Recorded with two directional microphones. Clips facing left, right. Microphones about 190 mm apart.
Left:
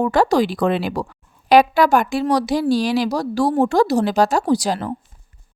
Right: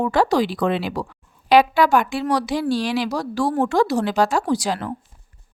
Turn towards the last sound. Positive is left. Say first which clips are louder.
# left 3 dB
turn(degrees=35)  # may be behind; listen again after turning